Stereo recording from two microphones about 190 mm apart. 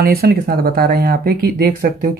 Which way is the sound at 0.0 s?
55° right (ahead or behind).